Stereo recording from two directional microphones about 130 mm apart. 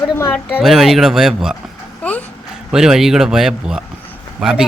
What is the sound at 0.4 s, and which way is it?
Speech, 5° right (ahead or behind).